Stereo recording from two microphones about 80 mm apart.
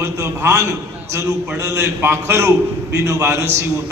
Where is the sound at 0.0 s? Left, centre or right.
Right.